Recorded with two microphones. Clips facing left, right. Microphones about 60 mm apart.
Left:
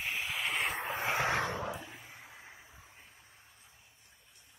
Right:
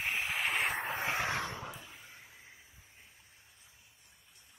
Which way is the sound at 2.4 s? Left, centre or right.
Left.